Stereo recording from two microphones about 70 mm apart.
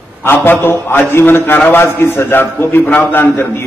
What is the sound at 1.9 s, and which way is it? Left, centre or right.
A man's voice, left.